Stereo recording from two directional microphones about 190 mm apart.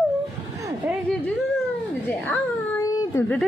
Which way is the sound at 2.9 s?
15° left (ahead or behind).